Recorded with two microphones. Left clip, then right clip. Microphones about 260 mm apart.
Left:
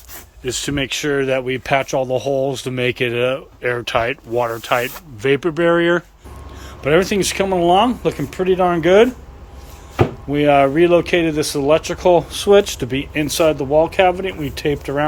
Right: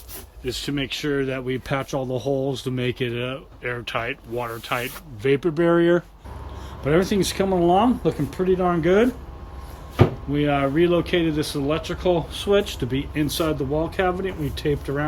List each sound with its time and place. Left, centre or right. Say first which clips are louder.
0.4 s speech: left 6 dB; centre
10.3 s speech: left 9 dB; centre